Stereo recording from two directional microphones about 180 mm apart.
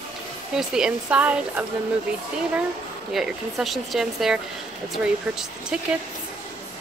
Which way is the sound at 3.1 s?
Centre (ahead or behind).